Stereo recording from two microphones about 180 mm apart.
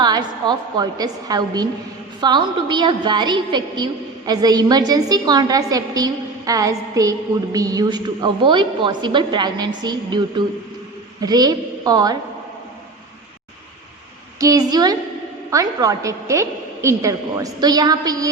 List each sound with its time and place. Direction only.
0.0 s a woman's voice: 25° right (ahead or behind)
14.3 s a woman's voice: 20° right (ahead or behind)